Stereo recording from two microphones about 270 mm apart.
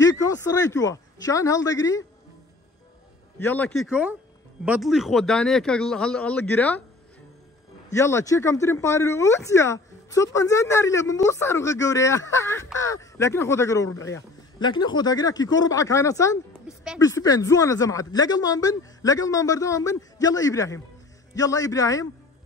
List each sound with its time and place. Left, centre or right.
0.0 s speech: centre
3.3 s speech: centre
7.9 s speech: centre
16.6 s a sound: centre
17.0 s speech: centre